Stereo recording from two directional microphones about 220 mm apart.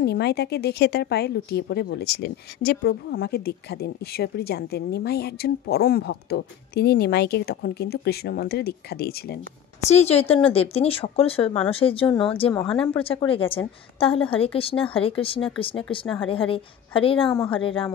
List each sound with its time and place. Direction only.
0.0 s a woman's voice: 45° left (ahead or behind)
9.8 s speech: 30° left (ahead or behind)